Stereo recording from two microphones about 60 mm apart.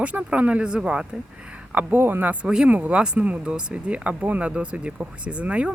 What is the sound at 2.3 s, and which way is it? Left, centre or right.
Speech, centre.